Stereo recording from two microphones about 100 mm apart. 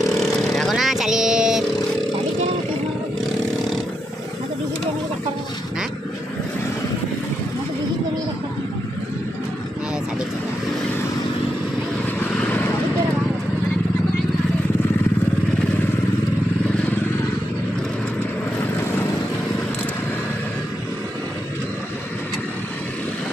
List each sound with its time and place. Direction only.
0.0 s vehicle: centre (ahead or behind)
12.4 s vehicle: 15° left (ahead or behind)